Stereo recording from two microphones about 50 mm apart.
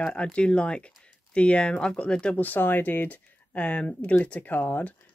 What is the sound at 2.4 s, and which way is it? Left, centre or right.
Speech, left.